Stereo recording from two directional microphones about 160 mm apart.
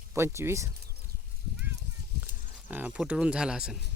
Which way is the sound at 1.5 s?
10° right (ahead or behind).